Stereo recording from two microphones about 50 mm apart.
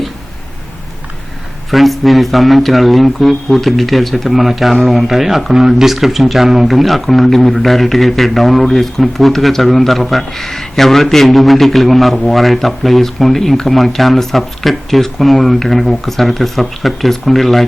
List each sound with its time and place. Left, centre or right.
1.7 s speech: centre